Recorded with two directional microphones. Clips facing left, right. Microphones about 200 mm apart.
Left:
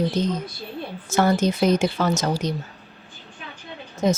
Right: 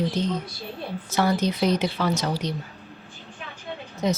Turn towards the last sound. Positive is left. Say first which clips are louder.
# left 4 dB
turn(degrees=50)  # may be behind; listen again after turning